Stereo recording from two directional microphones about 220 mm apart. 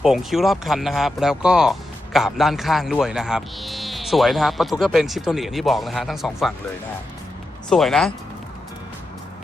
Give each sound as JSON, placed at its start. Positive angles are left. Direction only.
{"t": 0.0, "sound": "speech", "side_deg": 0}
{"t": 7.7, "sound": "speech", "side_deg": 0}